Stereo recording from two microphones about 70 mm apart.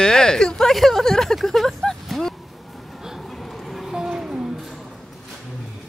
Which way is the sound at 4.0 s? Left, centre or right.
Centre.